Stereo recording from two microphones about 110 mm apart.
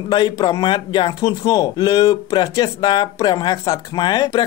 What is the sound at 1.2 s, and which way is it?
Speech, 35° left (ahead or behind).